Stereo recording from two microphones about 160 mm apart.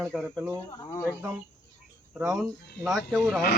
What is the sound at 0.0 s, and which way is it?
Speech, 5° right (ahead or behind).